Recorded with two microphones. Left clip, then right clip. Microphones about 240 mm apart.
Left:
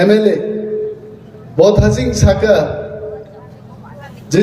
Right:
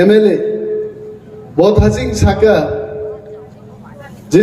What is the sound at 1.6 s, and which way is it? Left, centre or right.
Speech, centre.